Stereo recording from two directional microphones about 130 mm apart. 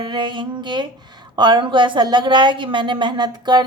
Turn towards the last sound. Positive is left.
turn(degrees=-35)  # may be behind; listen again after turning